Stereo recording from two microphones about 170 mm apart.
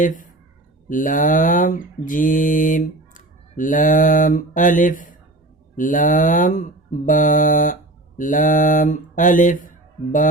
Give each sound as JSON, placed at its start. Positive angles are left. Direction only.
{"t": 0.0, "sound": "speech", "side_deg": 50}
{"t": 0.9, "sound": "mantra", "side_deg": 50}